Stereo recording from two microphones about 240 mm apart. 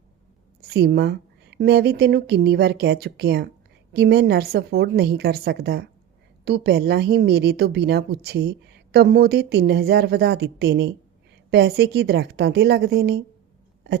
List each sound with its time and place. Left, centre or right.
0.7 s a woman's voice: right